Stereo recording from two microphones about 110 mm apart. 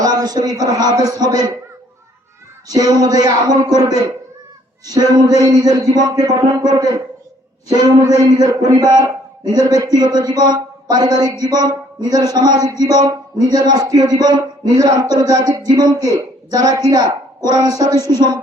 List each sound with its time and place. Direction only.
0.0 s a man's voice: 35° right (ahead or behind)
2.6 s a man's voice: 35° right (ahead or behind)
7.9 s a man's voice: 35° right (ahead or behind)